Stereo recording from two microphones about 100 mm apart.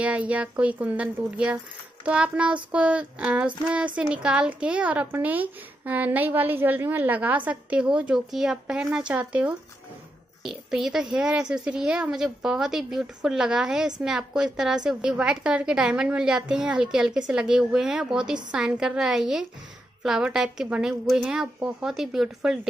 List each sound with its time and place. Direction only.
0.0 s a woman's voice: 15° right (ahead or behind)
10.4 s a woman's voice: centre (ahead or behind)